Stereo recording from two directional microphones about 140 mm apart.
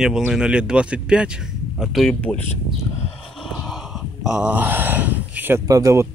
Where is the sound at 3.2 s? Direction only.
Centre (ahead or behind).